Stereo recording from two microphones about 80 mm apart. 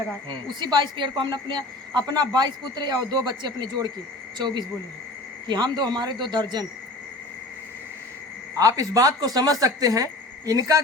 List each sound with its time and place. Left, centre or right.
0.3 s a woman's voice: right
8.5 s speech: right